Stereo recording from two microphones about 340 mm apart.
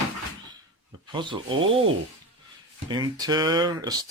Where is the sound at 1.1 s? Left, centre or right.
Centre.